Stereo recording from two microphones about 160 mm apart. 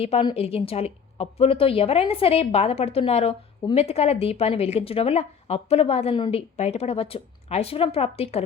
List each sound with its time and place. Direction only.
0.0 s a woman's voice: 35° left (ahead or behind)